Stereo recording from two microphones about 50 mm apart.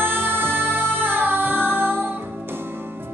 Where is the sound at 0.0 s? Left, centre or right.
Right.